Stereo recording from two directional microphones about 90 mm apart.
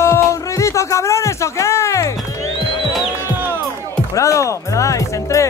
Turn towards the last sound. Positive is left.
turn(degrees=35)  # may be behind; listen again after turning